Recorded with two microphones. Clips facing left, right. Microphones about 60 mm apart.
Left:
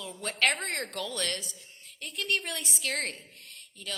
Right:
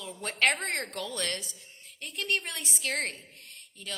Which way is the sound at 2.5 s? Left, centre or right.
Right.